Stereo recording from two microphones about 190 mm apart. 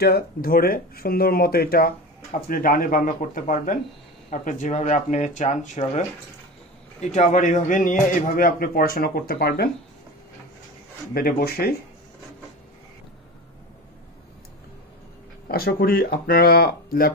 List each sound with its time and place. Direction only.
0.0 s speech: 55° left (ahead or behind)
11.1 s speech: 50° left (ahead or behind)
15.4 s speech: 50° left (ahead or behind)